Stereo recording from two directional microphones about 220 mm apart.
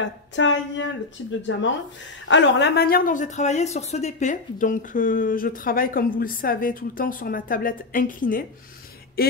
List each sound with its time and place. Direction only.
0.0 s speech: 55° left (ahead or behind)